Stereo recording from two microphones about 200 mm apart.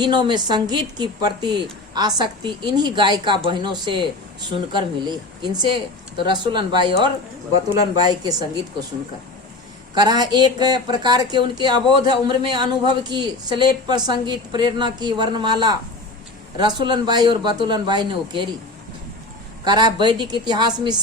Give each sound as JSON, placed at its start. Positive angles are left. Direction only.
{"t": 0.0, "sound": "speech", "side_deg": -20}
{"t": 9.9, "sound": "speech", "side_deg": -20}
{"t": 19.6, "sound": "speech", "side_deg": -20}